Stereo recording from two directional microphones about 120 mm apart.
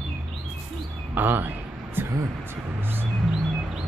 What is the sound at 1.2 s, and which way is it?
Speech, 15° right (ahead or behind).